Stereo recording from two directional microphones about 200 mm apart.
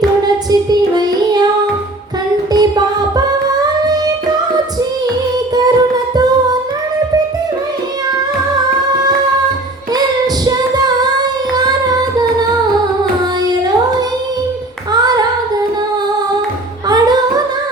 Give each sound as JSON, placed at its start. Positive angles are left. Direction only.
{"t": 0.7, "sound": "child singing", "side_deg": -20}
{"t": 2.5, "sound": "music", "side_deg": -20}
{"t": 10.4, "sound": "singing", "side_deg": -20}
{"t": 14.9, "sound": "singing", "side_deg": -20}